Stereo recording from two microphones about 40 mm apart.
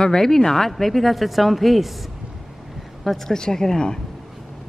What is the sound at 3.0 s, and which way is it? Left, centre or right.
Speech, centre.